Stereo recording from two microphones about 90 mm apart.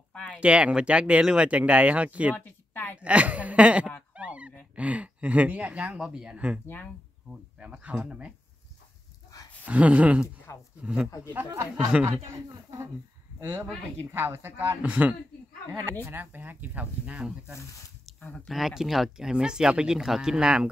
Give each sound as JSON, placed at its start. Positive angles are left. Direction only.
{"t": 0.1, "sound": "a sound", "side_deg": 15}
{"t": 0.4, "sound": "speech", "side_deg": -15}
{"t": 2.3, "sound": "a sound", "side_deg": 20}
{"t": 3.0, "sound": "speech", "side_deg": -15}
{"t": 4.1, "sound": "honk", "side_deg": -15}
{"t": 4.7, "sound": "speech", "side_deg": -15}
{"t": 9.7, "sound": "speech", "side_deg": -15}
{"t": 10.2, "sound": "speech", "side_deg": 30}
{"t": 10.8, "sound": "speech", "side_deg": -10}
{"t": 11.3, "sound": "speech", "side_deg": -30}
{"t": 13.4, "sound": "speech", "side_deg": -30}
{"t": 14.8, "sound": "speech", "side_deg": -15}
{"t": 18.5, "sound": "speech", "side_deg": -5}